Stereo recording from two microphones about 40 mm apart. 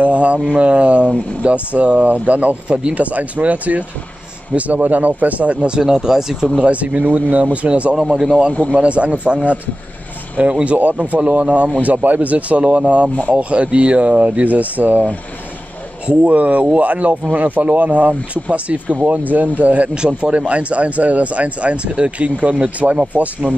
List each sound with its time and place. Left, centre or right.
0.0 s speech: right
5.8 s speech: centre
6.6 s speech: right
16.1 s speech: right
20.0 s speech: right